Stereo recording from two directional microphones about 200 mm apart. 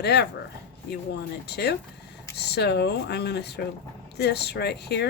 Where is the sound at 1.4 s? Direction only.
55° left (ahead or behind).